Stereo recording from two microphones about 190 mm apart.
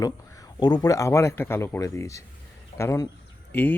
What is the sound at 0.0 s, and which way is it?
Speech, 20° left (ahead or behind).